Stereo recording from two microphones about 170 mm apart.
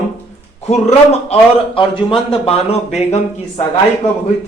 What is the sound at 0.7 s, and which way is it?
A man's voice, 40° left (ahead or behind).